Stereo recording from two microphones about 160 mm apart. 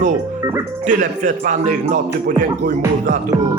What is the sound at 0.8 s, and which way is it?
Speech, 55° right (ahead or behind).